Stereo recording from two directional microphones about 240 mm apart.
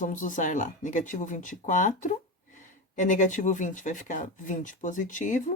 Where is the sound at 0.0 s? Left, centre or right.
Left.